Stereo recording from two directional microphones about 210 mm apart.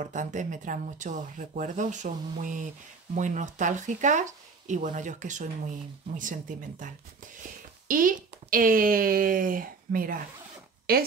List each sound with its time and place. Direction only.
0.0 s speech: 35° right (ahead or behind)
7.9 s a woman's voice: 40° right (ahead or behind)